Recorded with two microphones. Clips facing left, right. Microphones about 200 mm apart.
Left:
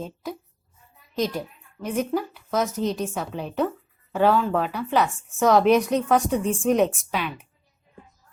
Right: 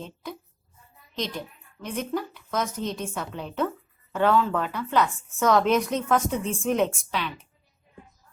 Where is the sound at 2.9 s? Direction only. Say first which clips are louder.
Left 4 dB; 15° left (ahead or behind).